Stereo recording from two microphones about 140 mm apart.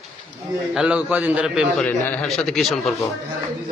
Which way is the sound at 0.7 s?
10° right (ahead or behind).